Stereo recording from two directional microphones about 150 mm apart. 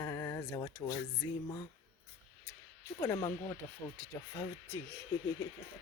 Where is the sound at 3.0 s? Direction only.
25° left (ahead or behind).